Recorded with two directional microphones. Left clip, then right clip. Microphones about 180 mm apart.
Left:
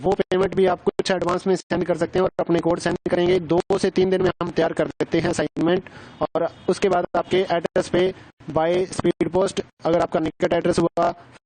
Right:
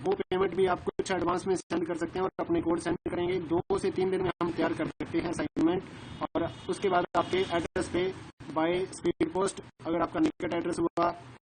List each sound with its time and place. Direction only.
0.2 s speech: 60° left (ahead or behind)